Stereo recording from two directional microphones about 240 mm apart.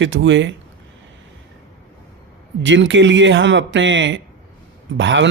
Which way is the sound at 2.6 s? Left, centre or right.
Right.